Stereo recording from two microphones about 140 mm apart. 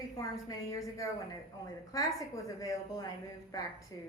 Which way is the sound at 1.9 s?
25° left (ahead or behind).